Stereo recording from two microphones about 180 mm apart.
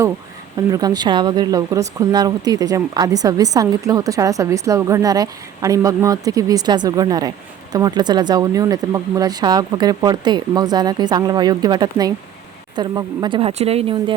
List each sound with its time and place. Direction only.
0.7 s speech: 20° right (ahead or behind)